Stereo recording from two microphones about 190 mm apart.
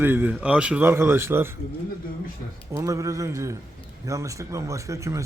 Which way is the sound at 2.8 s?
15° right (ahead or behind).